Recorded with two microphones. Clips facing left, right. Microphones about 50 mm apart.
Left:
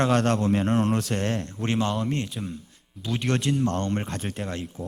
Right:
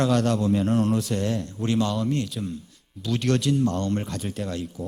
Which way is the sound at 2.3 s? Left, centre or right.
Centre.